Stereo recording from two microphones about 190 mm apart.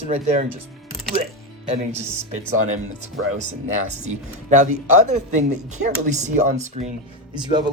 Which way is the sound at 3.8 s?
40° right (ahead or behind).